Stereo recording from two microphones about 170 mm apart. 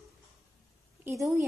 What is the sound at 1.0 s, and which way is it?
Speech, 15° right (ahead or behind).